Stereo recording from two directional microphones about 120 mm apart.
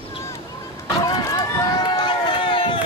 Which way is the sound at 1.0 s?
30° left (ahead or behind).